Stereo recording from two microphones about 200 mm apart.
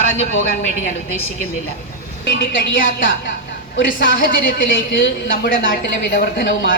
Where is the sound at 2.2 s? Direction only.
45° left (ahead or behind).